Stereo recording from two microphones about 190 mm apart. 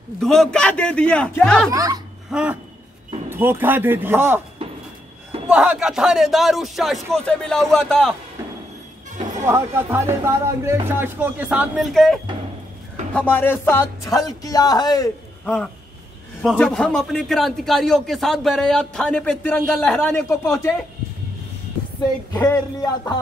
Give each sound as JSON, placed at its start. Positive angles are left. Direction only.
{"t": 0.2, "sound": "a man's voice", "side_deg": 0}
{"t": 1.7, "sound": "speech", "side_deg": -20}
{"t": 2.3, "sound": "speech", "side_deg": -5}
{"t": 5.5, "sound": "a man's voice", "side_deg": -5}
{"t": 9.4, "sound": "speech", "side_deg": -15}
{"t": 13.1, "sound": "music", "side_deg": 10}
{"t": 15.4, "sound": "a man's voice", "side_deg": 5}
{"t": 22.3, "sound": "speech", "side_deg": 20}